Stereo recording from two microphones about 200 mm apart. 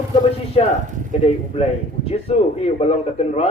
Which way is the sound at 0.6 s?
30° left (ahead or behind).